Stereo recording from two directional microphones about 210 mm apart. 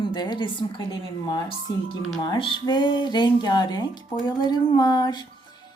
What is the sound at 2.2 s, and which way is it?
Speech, 20° left (ahead or behind).